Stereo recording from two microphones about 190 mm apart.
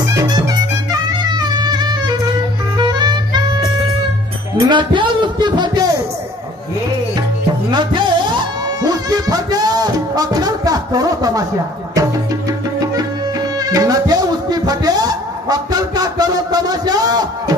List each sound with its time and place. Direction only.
0.0 s music: 20° right (ahead or behind)
4.6 s a sound: 25° right (ahead or behind)
7.7 s music: 25° right (ahead or behind)